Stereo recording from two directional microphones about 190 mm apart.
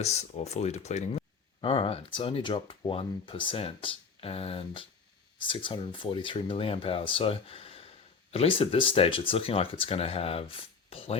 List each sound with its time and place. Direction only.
0.0 s speech: 35° left (ahead or behind)